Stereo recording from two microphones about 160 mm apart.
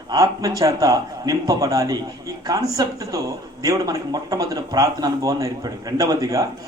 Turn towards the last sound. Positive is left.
turn(degrees=-20)  # may be behind; listen again after turning